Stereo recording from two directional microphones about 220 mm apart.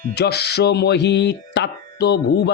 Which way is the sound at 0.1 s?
50° left (ahead or behind).